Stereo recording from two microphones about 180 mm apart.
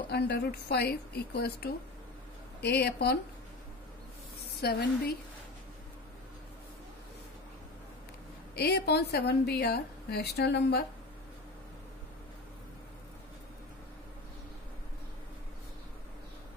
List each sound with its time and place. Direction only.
0.1 s a woman's voice: 65° left (ahead or behind)
4.6 s a woman's voice: 60° left (ahead or behind)
8.5 s a woman's voice: 65° left (ahead or behind)